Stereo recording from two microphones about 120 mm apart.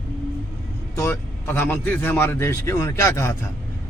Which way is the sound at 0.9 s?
20° left (ahead or behind).